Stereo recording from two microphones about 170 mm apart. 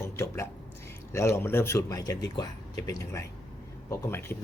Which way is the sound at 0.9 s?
15° left (ahead or behind).